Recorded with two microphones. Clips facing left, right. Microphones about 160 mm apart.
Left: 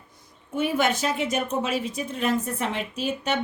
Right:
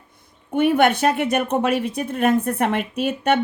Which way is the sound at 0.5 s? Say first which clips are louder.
Right 7 dB; 60° right (ahead or behind).